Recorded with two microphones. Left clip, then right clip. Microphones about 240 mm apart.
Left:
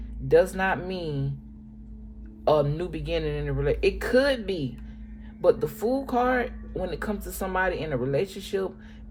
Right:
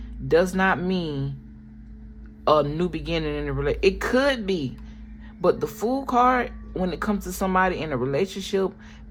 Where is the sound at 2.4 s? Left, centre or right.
Right.